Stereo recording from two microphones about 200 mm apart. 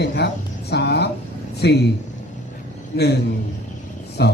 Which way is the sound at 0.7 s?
55° left (ahead or behind).